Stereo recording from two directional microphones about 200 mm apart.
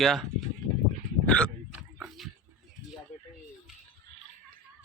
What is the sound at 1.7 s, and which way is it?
Oink, 5° right (ahead or behind).